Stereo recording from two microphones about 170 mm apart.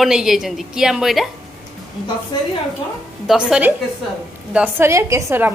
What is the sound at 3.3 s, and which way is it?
A woman's voice, 5° right (ahead or behind).